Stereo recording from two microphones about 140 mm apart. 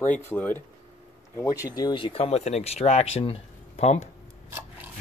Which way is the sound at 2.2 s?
55° left (ahead or behind).